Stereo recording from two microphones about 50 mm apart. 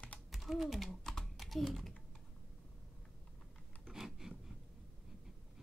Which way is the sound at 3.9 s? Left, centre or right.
Centre.